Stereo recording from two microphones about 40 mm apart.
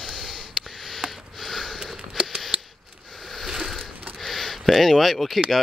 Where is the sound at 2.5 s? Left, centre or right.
Right.